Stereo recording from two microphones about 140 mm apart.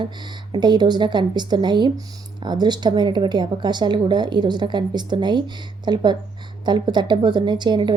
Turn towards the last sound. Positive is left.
turn(degrees=-35)  # may be behind; listen again after turning